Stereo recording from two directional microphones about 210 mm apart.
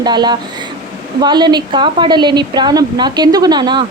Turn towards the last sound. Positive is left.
turn(degrees=-20)  # may be behind; listen again after turning